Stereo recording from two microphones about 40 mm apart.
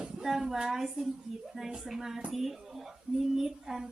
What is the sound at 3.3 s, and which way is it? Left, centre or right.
Speech, centre.